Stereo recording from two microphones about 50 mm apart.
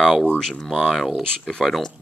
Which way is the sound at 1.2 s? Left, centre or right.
Centre.